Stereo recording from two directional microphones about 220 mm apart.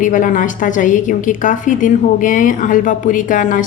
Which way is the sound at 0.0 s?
35° left (ahead or behind).